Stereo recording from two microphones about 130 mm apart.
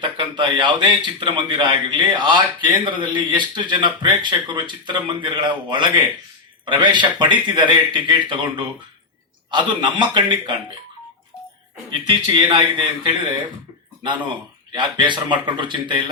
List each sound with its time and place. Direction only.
0.2 s a man's voice: 35° right (ahead or behind)
11.9 s a man's voice: 35° right (ahead or behind)
14.7 s a man's voice: 40° right (ahead or behind)